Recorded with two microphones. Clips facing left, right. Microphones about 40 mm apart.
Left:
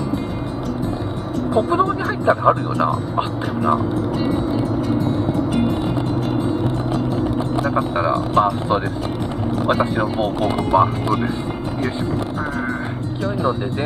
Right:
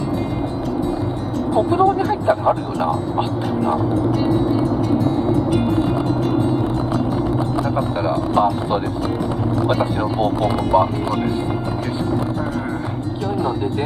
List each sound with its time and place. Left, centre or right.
1.5 s speech: left
8.4 s speech: centre